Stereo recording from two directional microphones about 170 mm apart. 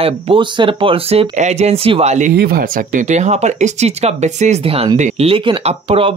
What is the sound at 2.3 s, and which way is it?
Speech, 60° right (ahead or behind).